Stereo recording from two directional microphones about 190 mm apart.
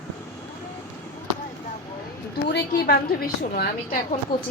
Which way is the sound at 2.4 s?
60° left (ahead or behind).